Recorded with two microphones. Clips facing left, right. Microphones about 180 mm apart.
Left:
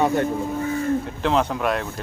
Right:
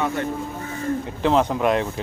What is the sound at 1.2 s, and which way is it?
Speech, 10° right (ahead or behind).